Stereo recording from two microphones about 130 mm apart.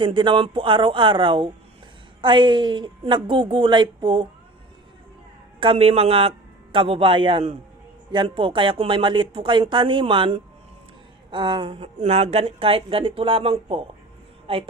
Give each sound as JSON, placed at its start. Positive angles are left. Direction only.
{"t": 0.0, "sound": "speech", "side_deg": -40}
{"t": 5.5, "sound": "speech", "side_deg": -45}
{"t": 11.9, "sound": "speech", "side_deg": -55}